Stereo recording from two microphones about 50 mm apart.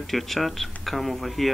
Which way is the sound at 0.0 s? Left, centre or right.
Centre.